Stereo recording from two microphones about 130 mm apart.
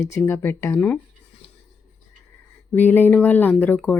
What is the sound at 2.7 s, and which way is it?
Speech, 15° left (ahead or behind).